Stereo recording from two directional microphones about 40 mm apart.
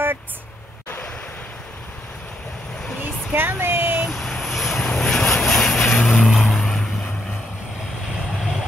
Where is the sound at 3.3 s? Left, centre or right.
Right.